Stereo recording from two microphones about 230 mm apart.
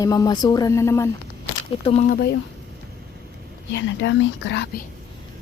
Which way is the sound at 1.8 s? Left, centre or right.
Left.